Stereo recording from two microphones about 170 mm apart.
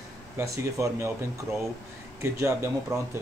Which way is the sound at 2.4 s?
15° right (ahead or behind).